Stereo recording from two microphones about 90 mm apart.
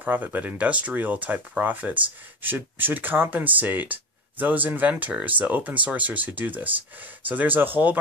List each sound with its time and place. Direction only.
0.0 s speech: 20° right (ahead or behind)